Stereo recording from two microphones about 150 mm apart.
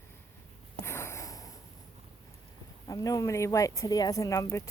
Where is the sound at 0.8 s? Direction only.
15° left (ahead or behind).